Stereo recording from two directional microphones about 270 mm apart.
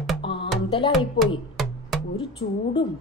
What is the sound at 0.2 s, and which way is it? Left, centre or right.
Music, centre.